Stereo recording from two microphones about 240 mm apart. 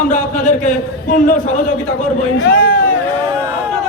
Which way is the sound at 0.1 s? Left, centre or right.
Left.